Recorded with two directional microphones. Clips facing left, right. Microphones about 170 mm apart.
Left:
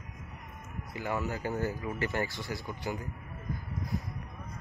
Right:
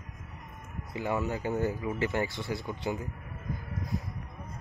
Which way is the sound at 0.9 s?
20° right (ahead or behind).